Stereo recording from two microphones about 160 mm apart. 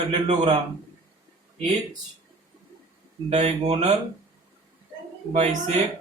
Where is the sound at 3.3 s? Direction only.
45° right (ahead or behind).